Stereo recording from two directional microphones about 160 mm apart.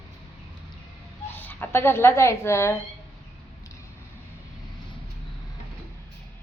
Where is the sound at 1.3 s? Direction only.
15° left (ahead or behind).